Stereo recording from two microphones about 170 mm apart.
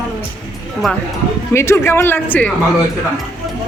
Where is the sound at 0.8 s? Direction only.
Centre (ahead or behind).